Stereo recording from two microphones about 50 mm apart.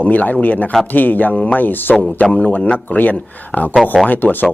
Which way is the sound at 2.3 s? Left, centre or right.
Left.